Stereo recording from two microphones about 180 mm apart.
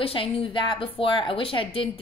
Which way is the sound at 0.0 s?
30° left (ahead or behind).